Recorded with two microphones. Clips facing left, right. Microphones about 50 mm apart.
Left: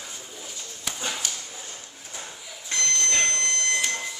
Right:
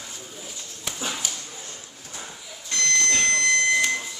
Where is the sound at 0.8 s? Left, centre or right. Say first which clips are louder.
Right 1 dB; centre.